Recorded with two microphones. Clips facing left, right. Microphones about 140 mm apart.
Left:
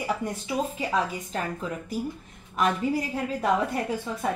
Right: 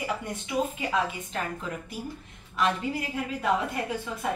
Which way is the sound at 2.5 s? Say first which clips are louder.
Left 3 dB; 45° left (ahead or behind).